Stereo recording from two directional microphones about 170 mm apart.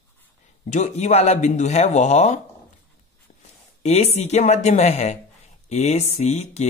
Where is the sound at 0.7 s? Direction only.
40° left (ahead or behind).